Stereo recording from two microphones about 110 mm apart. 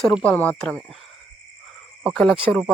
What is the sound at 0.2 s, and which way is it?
Speech, 15° left (ahead or behind).